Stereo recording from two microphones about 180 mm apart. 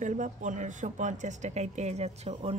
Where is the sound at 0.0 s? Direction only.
45° right (ahead or behind).